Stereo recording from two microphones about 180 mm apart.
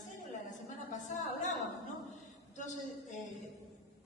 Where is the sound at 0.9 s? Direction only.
45° left (ahead or behind).